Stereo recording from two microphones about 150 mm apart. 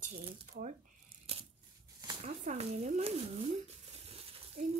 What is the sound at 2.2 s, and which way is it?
Speech, 45° right (ahead or behind).